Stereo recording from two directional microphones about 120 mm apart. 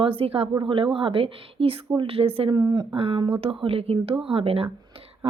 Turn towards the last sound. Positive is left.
turn(degrees=-55)  # may be behind; listen again after turning